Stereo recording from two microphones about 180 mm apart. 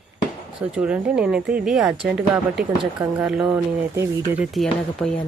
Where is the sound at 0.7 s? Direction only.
5° right (ahead or behind).